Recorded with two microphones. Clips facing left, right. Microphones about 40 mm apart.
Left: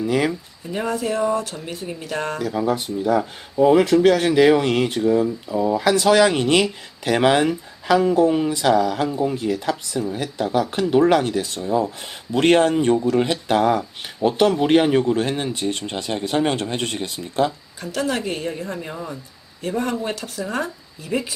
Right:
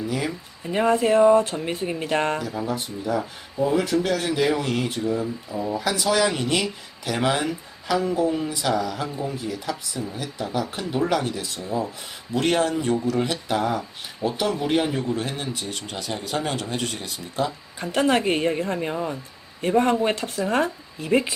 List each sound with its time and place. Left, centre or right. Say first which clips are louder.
0.7 s speech: right 4 dB; right
2.6 s speech: left 6 dB; left
14.3 s speech: left 7 dB; left
17.7 s speech: right 4 dB; right